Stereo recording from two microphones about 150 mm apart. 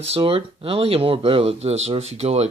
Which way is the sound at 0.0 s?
40° right (ahead or behind).